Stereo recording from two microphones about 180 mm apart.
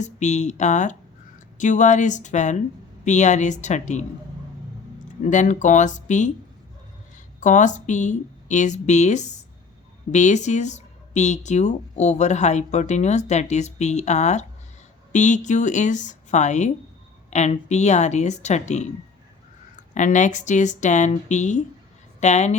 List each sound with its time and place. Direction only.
0.0 s speech: 40° left (ahead or behind)
5.2 s speech: 45° left (ahead or behind)
7.3 s speech: 45° left (ahead or behind)